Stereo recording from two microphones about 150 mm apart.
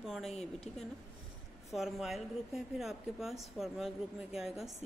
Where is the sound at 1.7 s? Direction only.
Centre (ahead or behind).